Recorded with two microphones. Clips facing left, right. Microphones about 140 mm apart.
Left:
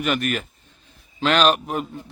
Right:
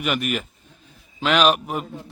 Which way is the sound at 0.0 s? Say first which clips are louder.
Left 1 dB; 5° right (ahead or behind).